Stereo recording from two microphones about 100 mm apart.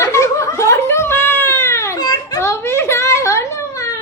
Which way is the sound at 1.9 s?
45° left (ahead or behind).